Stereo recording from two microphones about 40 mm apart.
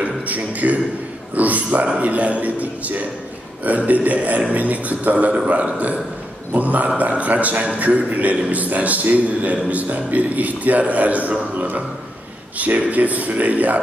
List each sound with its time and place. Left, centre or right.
0.0 s a man's voice: right